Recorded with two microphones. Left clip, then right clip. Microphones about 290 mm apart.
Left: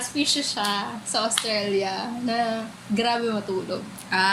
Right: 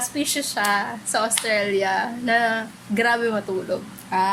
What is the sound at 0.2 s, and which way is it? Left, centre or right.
A woman's voice, right.